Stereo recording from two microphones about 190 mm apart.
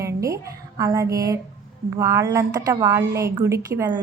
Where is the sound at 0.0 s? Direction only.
15° right (ahead or behind).